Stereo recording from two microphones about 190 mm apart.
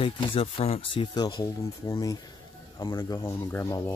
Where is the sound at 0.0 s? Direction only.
30° left (ahead or behind).